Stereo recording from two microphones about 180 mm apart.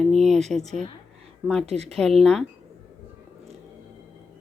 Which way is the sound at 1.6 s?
35° right (ahead or behind).